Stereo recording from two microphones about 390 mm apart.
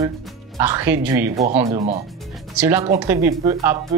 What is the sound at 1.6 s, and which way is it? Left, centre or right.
Speech, centre.